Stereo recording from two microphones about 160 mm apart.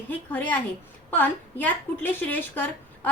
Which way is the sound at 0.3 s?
10° left (ahead or behind).